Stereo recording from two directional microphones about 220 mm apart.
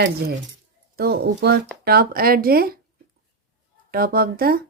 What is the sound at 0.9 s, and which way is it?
Speech, 45° right (ahead or behind).